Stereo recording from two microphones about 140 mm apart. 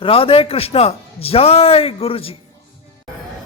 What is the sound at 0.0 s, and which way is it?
A man's voice, 40° left (ahead or behind).